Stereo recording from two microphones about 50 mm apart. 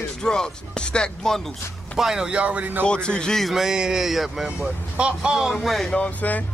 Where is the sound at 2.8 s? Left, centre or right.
Centre.